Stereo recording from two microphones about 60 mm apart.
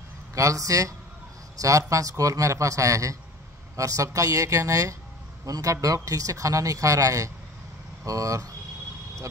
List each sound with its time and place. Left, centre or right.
0.3 s a man's voice: right